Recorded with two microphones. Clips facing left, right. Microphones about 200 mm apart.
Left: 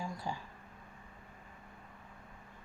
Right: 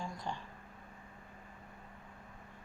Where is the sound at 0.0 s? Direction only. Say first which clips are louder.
Left 1 dB; 5° left (ahead or behind).